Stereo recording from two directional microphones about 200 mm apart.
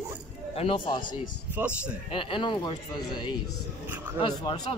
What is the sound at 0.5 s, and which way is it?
Speech, 25° left (ahead or behind).